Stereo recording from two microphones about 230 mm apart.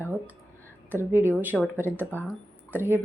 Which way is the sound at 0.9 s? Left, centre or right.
Centre.